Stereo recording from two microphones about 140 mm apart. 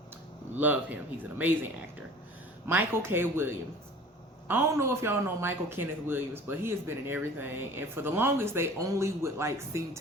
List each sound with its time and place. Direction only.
0.5 s a man's voice: 10° right (ahead or behind)
2.6 s a man's voice: 15° right (ahead or behind)